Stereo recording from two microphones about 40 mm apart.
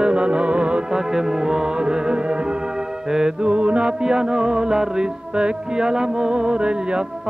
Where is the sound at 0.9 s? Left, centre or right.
Centre.